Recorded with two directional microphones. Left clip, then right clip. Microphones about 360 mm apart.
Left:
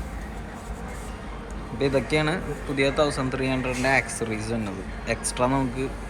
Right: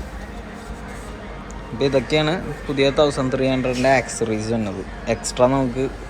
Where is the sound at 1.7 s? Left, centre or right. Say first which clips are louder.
Right 5 dB; centre.